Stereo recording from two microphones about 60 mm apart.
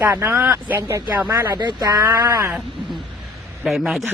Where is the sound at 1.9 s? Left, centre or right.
Right.